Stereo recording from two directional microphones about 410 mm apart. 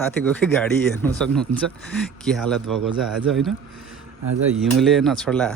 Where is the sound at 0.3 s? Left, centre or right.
Centre.